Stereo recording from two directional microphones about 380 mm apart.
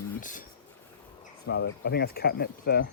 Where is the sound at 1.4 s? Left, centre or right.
Left.